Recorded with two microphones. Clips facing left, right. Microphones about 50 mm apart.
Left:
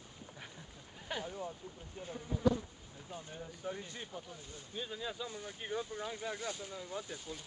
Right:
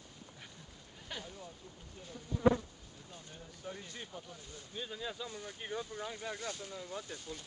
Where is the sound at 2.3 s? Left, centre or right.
Centre.